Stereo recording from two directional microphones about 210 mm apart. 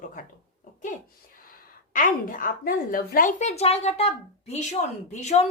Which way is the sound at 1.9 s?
40° left (ahead or behind).